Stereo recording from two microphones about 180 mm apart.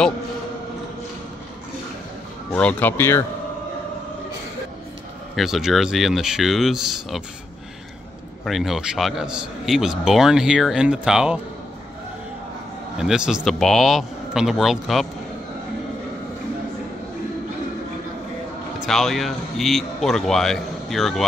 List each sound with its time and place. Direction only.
2.5 s speech: 10° left (ahead or behind)
5.3 s a man's voice: centre (ahead or behind)
8.5 s a man's voice: centre (ahead or behind)
12.9 s a man's voice: 5° right (ahead or behind)
18.9 s a man's voice: centre (ahead or behind)